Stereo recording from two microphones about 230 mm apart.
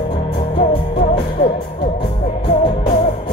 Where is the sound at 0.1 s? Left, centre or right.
Left.